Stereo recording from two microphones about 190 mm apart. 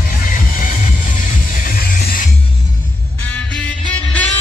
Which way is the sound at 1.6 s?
45° left (ahead or behind).